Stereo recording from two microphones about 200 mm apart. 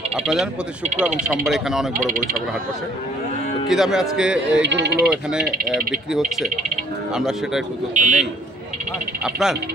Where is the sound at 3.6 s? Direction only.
Centre (ahead or behind).